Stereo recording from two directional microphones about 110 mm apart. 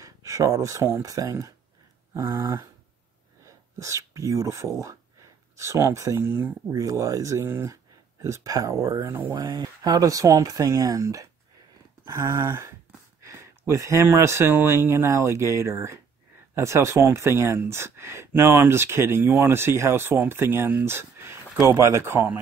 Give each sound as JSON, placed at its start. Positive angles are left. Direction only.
{"t": 0.0, "sound": "speech", "side_deg": -30}
{"t": 9.3, "sound": "speech", "side_deg": -35}